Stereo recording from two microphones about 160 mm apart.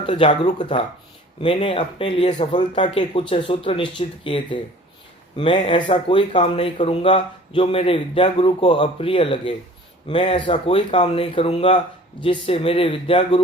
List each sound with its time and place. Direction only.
0.0 s speech: 35° left (ahead or behind)
3.2 s speech: 35° left (ahead or behind)
5.7 s speech: 30° left (ahead or behind)